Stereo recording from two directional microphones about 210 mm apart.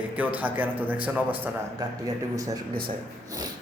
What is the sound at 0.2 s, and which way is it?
A man's voice, 5° right (ahead or behind).